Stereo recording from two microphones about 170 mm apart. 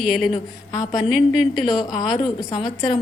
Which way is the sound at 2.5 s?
25° left (ahead or behind).